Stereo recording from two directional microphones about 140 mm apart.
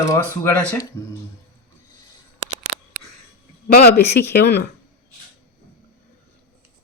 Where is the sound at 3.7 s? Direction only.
90° left.